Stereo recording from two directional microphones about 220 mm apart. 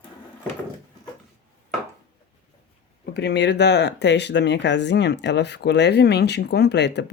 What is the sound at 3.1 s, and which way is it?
Speech, 50° left (ahead or behind).